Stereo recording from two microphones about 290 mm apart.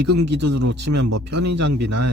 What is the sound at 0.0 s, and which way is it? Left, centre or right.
Speech, right.